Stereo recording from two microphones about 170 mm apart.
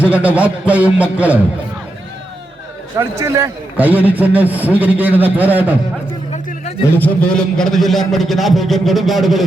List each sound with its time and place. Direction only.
0.0 s a man's voice: 10° right (ahead or behind)
3.0 s a man's voice: 15° right (ahead or behind)
6.9 s a man's voice: 10° left (ahead or behind)